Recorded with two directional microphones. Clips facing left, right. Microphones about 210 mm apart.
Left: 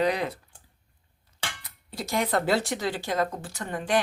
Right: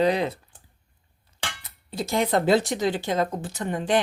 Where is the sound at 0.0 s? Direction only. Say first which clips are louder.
Right 4 dB; 25° right (ahead or behind).